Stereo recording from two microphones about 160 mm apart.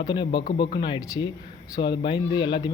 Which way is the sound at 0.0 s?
25° left (ahead or behind).